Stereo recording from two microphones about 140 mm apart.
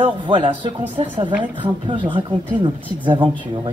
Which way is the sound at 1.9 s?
35° right (ahead or behind).